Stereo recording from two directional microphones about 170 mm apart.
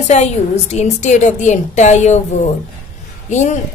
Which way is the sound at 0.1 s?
40° left (ahead or behind).